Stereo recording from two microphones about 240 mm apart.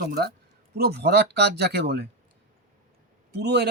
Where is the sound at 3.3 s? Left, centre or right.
Right.